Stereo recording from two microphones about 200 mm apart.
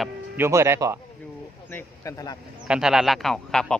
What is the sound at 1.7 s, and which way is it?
Speech, 10° left (ahead or behind).